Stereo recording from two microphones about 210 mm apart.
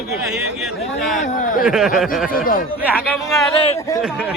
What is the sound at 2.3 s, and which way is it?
Speech, 40° left (ahead or behind).